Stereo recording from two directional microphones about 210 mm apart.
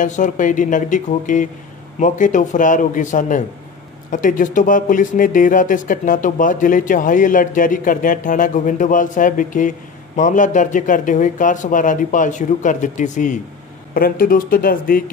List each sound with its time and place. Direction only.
0.0 s speech: 35° left (ahead or behind)